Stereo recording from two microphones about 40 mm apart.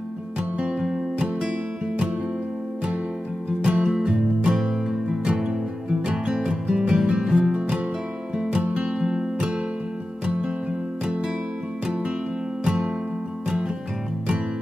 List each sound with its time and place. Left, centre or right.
0.6 s music: right
3.6 s music: right
9.0 s music: right
12.6 s music: right